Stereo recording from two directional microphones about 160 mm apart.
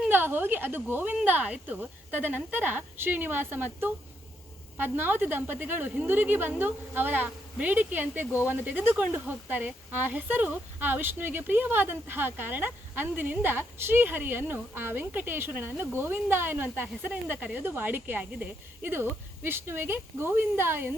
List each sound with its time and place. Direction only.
0.0 s speech: 15° right (ahead or behind)